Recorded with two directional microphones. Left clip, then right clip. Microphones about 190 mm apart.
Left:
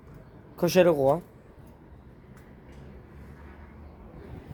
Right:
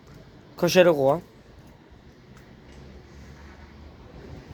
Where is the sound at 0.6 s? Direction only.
5° left (ahead or behind).